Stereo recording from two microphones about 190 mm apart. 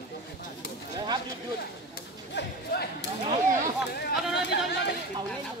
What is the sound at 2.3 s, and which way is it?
Speech, 65° left (ahead or behind).